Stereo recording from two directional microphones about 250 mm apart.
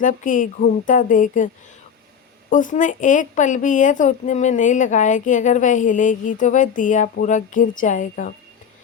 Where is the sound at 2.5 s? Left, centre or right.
Left.